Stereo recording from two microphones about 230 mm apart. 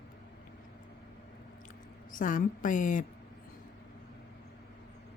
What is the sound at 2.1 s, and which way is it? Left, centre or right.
Speech, left.